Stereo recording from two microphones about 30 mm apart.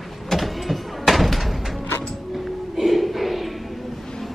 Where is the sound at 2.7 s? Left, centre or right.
Centre.